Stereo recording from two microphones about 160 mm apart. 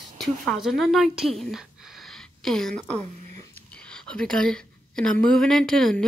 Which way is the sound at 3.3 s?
20° left (ahead or behind).